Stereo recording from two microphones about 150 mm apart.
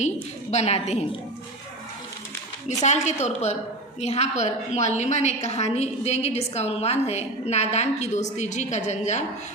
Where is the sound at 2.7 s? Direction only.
50° left (ahead or behind).